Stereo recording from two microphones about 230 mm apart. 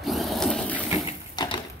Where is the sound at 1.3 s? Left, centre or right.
Centre.